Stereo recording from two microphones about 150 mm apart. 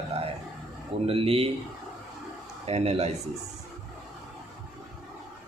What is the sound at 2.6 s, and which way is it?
Speech, 45° right (ahead or behind).